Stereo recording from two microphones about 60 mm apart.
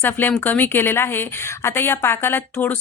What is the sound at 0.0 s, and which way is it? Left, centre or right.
A woman's voice, left.